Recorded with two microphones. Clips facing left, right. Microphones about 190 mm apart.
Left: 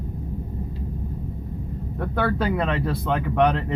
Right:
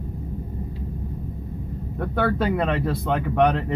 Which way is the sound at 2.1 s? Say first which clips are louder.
Right 1 dB; 55° right (ahead or behind).